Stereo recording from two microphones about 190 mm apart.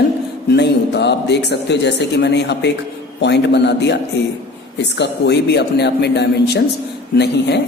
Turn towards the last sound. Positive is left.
turn(degrees=65)  # may be behind; listen again after turning